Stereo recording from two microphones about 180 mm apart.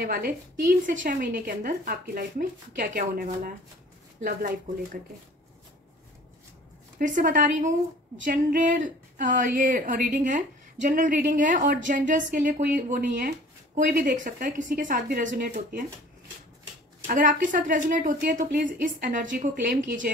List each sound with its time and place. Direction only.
0.0 s a woman's voice: 50° right (ahead or behind)
7.0 s a woman's voice: 45° right (ahead or behind)
17.0 s a woman's voice: 45° right (ahead or behind)